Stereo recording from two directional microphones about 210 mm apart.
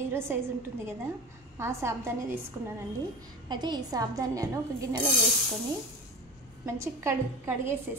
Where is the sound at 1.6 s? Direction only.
15° right (ahead or behind).